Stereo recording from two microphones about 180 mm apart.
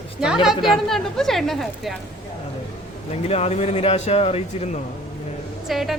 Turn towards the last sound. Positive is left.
turn(degrees=0)  # may be behind; listen again after turning